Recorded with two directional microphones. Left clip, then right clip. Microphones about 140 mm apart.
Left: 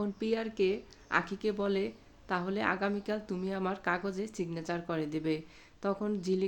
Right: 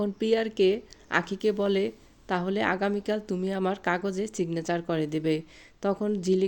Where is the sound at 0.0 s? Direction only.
45° right (ahead or behind).